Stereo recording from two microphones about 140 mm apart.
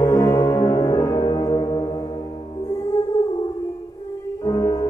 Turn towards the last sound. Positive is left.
turn(degrees=25)  # may be behind; listen again after turning